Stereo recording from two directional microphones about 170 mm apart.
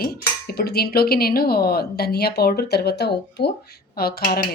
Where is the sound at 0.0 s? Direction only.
65° left (ahead or behind).